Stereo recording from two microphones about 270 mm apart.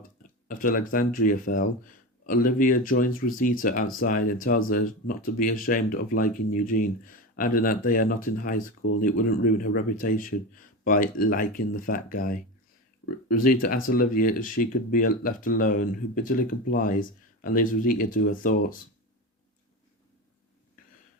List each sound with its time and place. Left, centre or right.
0.2 s speech: left